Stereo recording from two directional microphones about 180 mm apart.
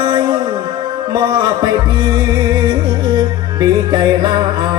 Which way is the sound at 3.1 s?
25° right (ahead or behind).